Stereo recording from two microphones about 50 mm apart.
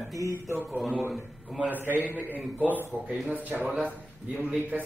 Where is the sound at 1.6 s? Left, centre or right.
Right.